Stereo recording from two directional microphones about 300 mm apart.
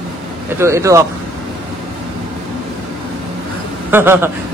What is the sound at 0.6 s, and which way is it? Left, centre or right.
Speech, centre.